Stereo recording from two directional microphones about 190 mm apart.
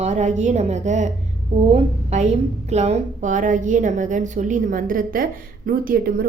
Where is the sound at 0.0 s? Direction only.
35° right (ahead or behind).